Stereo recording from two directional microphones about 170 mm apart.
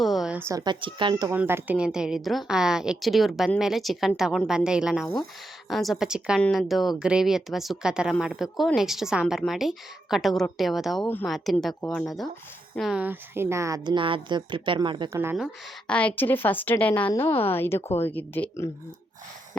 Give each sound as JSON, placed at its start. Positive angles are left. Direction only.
{"t": 0.0, "sound": "speech", "side_deg": 0}
{"t": 1.3, "sound": "a woman's voice", "side_deg": -15}
{"t": 15.1, "sound": "speech", "side_deg": -15}
{"t": 15.9, "sound": "a woman's voice", "side_deg": 10}